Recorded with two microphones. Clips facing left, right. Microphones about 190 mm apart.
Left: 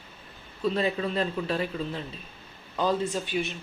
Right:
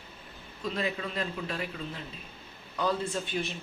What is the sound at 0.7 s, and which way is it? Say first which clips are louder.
Speech: left 4 dB; 30° left (ahead or behind).